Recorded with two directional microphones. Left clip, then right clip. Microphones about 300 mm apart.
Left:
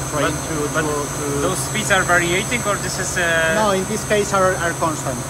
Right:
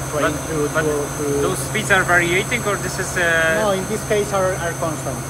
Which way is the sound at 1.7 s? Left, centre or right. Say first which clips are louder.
Right 1 dB; centre.